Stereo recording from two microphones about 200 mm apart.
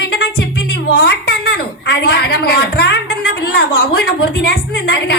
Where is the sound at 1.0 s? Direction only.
50° left (ahead or behind).